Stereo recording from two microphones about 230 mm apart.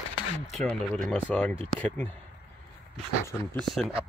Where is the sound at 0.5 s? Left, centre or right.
Centre.